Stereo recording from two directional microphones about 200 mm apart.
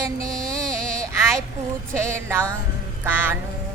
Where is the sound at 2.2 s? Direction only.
10° right (ahead or behind).